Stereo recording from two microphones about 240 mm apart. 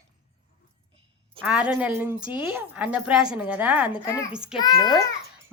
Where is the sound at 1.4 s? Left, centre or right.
Centre.